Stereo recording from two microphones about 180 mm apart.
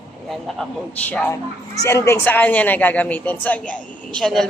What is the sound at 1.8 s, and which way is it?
A man's voice, 15° left (ahead or behind).